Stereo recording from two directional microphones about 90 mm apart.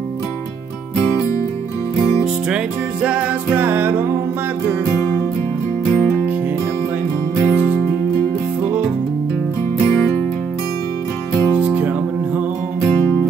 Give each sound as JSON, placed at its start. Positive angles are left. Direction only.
{"t": 2.5, "sound": "music", "side_deg": -15}
{"t": 4.9, "sound": "music", "side_deg": 25}
{"t": 7.4, "sound": "music", "side_deg": 20}
{"t": 11.3, "sound": "music", "side_deg": 25}
{"t": 11.6, "sound": "music", "side_deg": -20}